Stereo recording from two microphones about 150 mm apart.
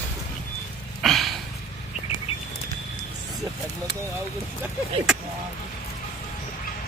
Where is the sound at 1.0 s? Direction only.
Centre (ahead or behind).